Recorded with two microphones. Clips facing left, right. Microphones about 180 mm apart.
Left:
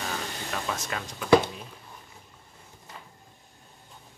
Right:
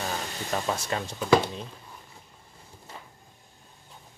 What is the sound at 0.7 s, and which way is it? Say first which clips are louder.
Speech: right 4 dB; 30° right (ahead or behind).